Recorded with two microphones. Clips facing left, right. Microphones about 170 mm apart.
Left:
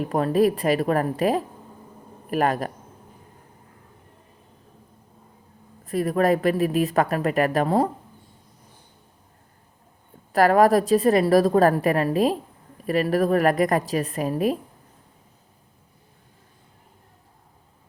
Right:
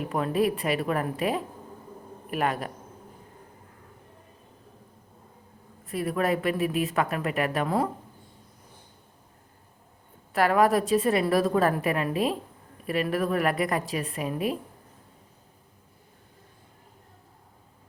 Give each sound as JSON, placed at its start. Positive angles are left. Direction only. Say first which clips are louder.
{"t": 0.0, "sound": "speech", "louder": "left 5 dB", "side_deg": 40}
{"t": 5.8, "sound": "speech", "louder": "left 6 dB", "side_deg": 40}
{"t": 10.3, "sound": "speech", "louder": "left 5 dB", "side_deg": 40}